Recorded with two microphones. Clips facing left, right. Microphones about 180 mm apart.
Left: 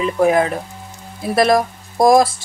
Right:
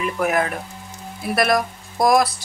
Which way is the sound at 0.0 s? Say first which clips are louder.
Left 6 dB; 25° left (ahead or behind).